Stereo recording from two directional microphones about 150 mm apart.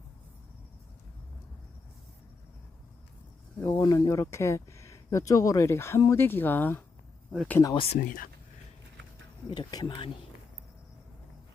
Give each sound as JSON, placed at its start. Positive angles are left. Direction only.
{"t": 3.8, "sound": "speech", "side_deg": 25}
{"t": 7.6, "sound": "speech", "side_deg": 30}
{"t": 7.9, "sound": "speech", "side_deg": 65}
{"t": 9.5, "sound": "speech", "side_deg": 30}